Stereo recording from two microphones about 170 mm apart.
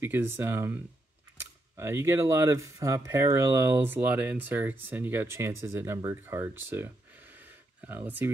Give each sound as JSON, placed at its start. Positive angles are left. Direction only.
{"t": 0.0, "sound": "speech", "side_deg": -10}